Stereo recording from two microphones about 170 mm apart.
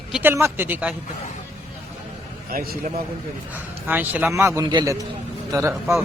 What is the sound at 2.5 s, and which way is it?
Speech, 55° right (ahead or behind).